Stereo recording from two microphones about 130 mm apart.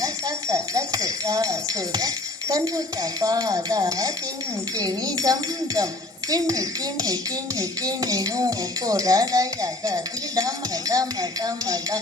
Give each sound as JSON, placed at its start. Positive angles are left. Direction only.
{"t": 0.0, "sound": "speech", "side_deg": -25}